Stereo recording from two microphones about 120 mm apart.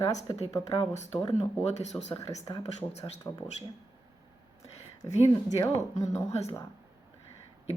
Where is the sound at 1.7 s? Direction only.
65° left (ahead or behind).